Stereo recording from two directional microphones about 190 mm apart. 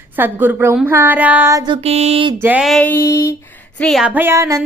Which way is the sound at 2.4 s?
5° right (ahead or behind).